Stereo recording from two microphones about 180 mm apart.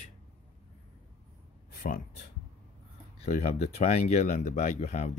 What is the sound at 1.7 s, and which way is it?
Speech, 45° left (ahead or behind).